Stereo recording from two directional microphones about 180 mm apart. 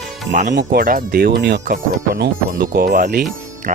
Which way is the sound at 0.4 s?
65° right (ahead or behind).